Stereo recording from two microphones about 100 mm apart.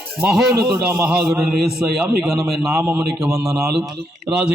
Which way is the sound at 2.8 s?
15° right (ahead or behind).